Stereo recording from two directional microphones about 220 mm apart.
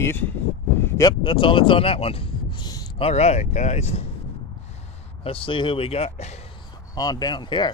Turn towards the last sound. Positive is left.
turn(degrees=20)  # may be behind; listen again after turning